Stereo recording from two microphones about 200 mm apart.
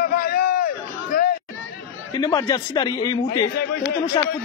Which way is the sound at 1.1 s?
45° left (ahead or behind).